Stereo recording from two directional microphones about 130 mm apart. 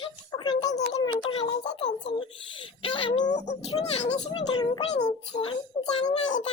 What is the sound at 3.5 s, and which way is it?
Speech, 55° left (ahead or behind).